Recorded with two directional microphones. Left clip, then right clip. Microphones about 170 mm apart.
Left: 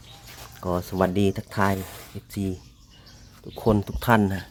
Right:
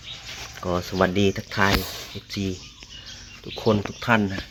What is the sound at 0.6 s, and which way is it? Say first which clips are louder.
Speech: right 2 dB; 20° left (ahead or behind).